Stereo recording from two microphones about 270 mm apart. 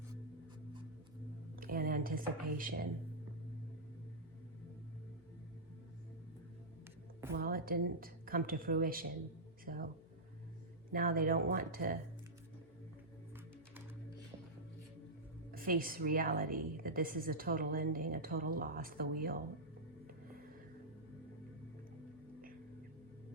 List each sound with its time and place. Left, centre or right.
1.5 s speech: right
7.3 s a woman's voice: right
10.9 s a woman's voice: right
15.5 s a woman's voice: right